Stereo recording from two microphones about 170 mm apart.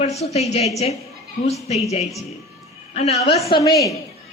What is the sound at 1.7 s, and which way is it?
A woman's voice, 40° left (ahead or behind).